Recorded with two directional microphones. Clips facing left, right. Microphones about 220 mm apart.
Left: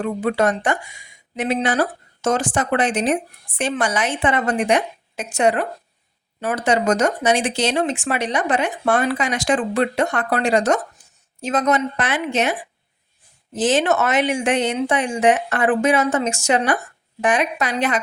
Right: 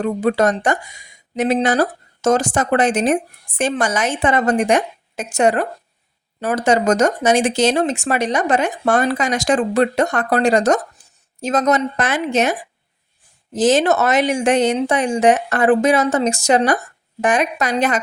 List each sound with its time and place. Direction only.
0.0 s speech: 40° right (ahead or behind)